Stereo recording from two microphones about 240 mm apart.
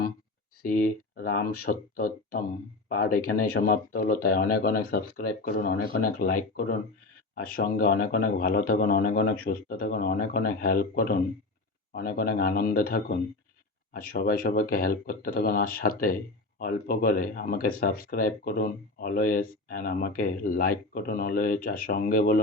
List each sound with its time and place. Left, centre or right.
0.6 s speech: left